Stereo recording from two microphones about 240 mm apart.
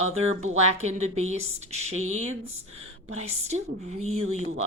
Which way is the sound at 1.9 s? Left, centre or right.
Right.